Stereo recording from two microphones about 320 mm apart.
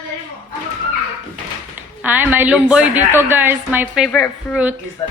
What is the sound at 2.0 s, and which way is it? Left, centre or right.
A woman's voice, centre.